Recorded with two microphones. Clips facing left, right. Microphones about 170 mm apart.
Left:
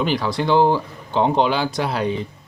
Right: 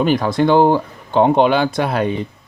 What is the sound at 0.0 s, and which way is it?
Speech, 50° right (ahead or behind).